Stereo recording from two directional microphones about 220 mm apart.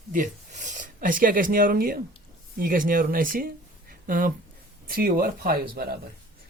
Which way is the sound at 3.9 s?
40° right (ahead or behind).